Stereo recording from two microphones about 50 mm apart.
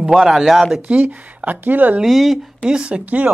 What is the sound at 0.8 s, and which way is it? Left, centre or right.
A woman's voice, right.